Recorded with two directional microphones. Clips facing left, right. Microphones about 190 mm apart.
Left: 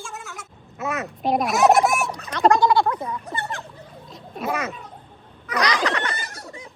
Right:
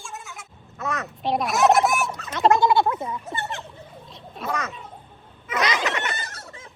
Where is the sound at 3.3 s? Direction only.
25° right (ahead or behind).